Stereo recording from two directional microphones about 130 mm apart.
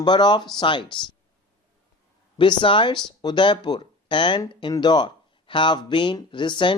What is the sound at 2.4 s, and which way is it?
Speech, 40° left (ahead or behind).